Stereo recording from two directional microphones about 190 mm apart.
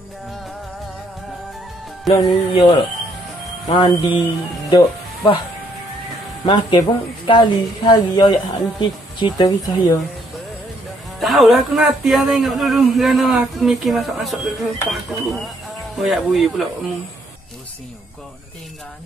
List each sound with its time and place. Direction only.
2.0 s speech: 25° left (ahead or behind)
6.4 s speech: 25° left (ahead or behind)
11.1 s speech: centre (ahead or behind)